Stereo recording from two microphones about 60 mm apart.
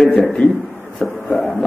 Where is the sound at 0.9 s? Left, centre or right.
Centre.